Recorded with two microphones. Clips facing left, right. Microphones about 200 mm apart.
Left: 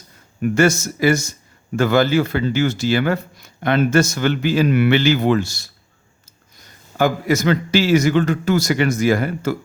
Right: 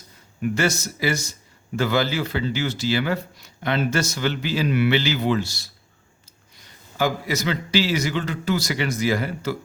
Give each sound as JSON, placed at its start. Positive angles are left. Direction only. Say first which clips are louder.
{"t": 0.4, "sound": "a man's voice", "louder": "left 7 dB", "side_deg": 50}